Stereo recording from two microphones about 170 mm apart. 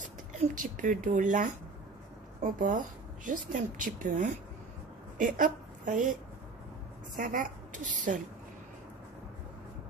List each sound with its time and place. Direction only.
0.6 s a woman's voice: 50° right (ahead or behind)
7.2 s a woman's voice: 50° right (ahead or behind)